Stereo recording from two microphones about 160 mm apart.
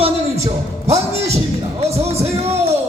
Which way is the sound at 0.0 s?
40° right (ahead or behind).